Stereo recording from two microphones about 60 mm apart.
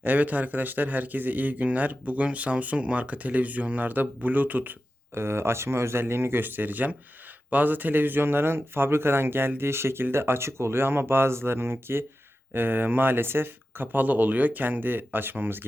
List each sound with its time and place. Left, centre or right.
0.0 s speech: right